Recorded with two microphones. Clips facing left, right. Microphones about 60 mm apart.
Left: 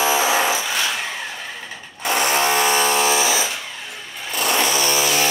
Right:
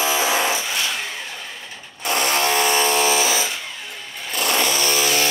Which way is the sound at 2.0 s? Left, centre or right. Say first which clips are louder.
Left 2 dB; centre.